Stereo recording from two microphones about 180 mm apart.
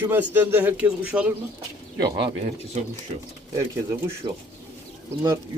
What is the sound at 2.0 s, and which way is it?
Speech, 25° right (ahead or behind).